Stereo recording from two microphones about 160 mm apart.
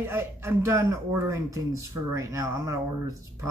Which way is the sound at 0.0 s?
15° right (ahead or behind).